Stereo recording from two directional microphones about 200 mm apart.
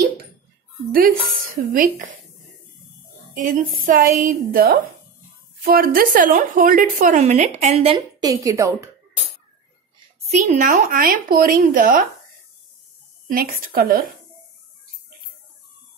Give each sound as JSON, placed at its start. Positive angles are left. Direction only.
{"t": 0.9, "sound": "speech", "side_deg": -45}
{"t": 3.3, "sound": "a woman's voice", "side_deg": -40}
{"t": 8.3, "sound": "a woman's voice", "side_deg": -15}
{"t": 10.5, "sound": "speech", "side_deg": -40}
{"t": 13.3, "sound": "speech", "side_deg": -45}